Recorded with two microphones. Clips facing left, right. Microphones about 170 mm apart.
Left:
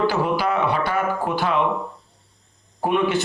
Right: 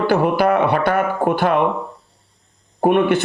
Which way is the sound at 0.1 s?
55° right (ahead or behind).